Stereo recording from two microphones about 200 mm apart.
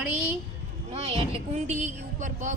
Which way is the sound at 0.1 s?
10° right (ahead or behind).